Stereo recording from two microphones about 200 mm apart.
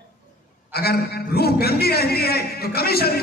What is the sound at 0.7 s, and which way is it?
A man's voice, 50° left (ahead or behind).